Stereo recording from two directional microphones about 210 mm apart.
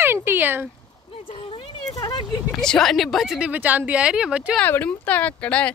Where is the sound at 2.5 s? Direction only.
5° left (ahead or behind).